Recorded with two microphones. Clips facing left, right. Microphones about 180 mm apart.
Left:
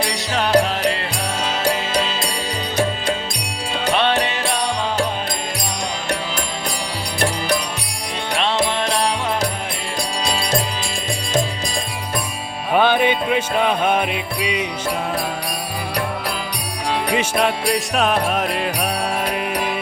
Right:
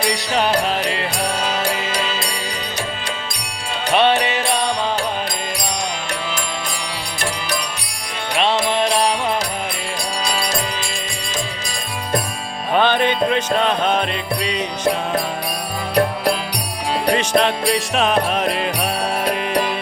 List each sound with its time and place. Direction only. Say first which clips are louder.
0.3 s music: left 3 dB; centre (ahead or behind)
3.9 s music: right 4 dB; 5° right (ahead or behind)
10.2 s music: right 1 dB; 25° left (ahead or behind)
12.7 s music: left 1 dB; 10° left (ahead or behind)
17.1 s jingle bell: right 4 dB; 5° left (ahead or behind)
19.3 s music: right 3 dB; 5° left (ahead or behind)